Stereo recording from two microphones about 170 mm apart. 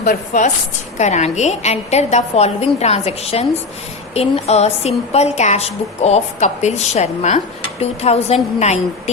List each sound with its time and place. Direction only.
0.0 s a woman's voice: 50° left (ahead or behind)